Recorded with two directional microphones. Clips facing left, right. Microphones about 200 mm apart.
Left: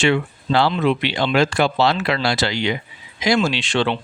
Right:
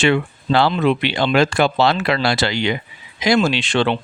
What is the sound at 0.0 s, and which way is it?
Speech, 60° right (ahead or behind).